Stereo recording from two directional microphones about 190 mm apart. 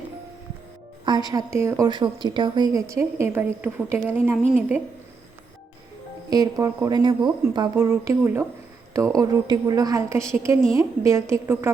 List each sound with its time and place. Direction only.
1.0 s a woman's voice: 20° right (ahead or behind)
6.3 s a woman's voice: 20° right (ahead or behind)